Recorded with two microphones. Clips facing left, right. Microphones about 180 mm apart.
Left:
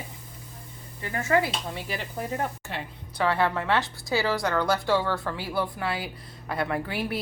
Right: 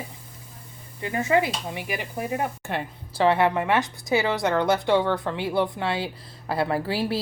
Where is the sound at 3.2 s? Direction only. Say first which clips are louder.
Right 5 dB; 20° right (ahead or behind).